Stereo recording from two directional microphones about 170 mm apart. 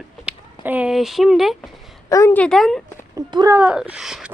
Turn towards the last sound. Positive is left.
turn(degrees=-5)  # may be behind; listen again after turning